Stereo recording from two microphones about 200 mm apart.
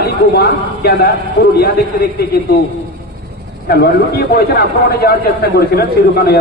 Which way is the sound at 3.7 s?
50° left (ahead or behind).